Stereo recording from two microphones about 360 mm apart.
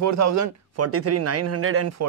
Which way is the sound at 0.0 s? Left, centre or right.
Right.